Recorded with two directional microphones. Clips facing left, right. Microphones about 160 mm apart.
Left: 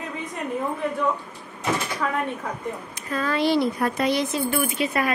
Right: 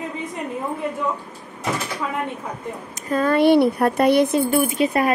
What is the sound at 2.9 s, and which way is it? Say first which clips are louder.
A woman's voice: right 8 dB; 45° right (ahead or behind).